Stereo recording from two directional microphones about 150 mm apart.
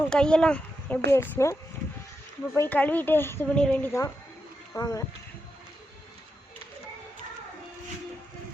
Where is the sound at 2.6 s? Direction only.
10° left (ahead or behind).